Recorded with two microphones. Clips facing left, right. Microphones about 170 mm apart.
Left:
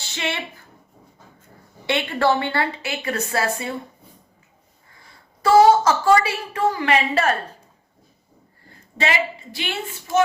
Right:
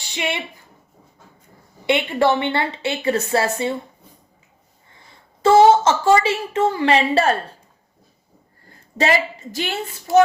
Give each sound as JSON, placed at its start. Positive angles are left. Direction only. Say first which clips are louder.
{"t": 0.0, "sound": "a woman's voice", "louder": "right 2 dB", "side_deg": -15}
{"t": 1.9, "sound": "a woman's voice", "louder": "right 2 dB", "side_deg": -20}
{"t": 5.4, "sound": "a woman's voice", "louder": "right 1 dB", "side_deg": -25}
{"t": 9.0, "sound": "a woman's voice", "louder": "right 4 dB", "side_deg": -40}